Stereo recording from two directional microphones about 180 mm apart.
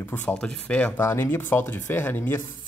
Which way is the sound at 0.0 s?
10° left (ahead or behind).